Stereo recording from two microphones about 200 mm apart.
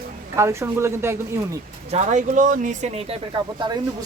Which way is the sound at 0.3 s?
15° right (ahead or behind).